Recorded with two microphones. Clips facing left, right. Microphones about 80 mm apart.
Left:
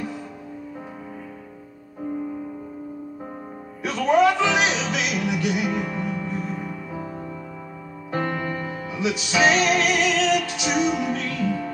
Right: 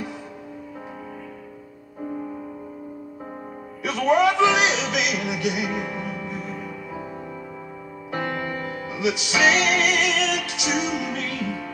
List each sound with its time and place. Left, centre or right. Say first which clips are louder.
3.8 s music: left 1 dB; left
8.1 s music: left 2 dB; left